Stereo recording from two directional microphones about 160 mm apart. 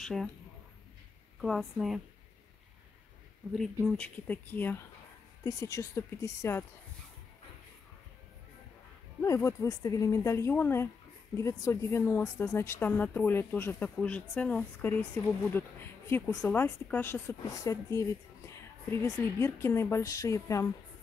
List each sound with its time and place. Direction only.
0.0 s speech: centre (ahead or behind)
1.4 s a woman's voice: centre (ahead or behind)
3.8 s speech: 5° left (ahead or behind)
9.2 s speech: 20° left (ahead or behind)